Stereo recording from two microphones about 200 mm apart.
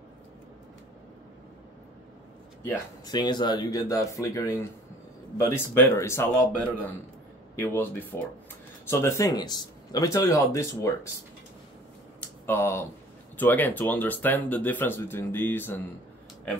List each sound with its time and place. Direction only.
2.6 s speech: 20° left (ahead or behind)
7.5 s speech: 10° left (ahead or behind)
12.4 s speech: 15° left (ahead or behind)